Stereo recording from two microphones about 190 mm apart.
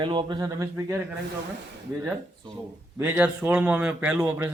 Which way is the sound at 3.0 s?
10° right (ahead or behind).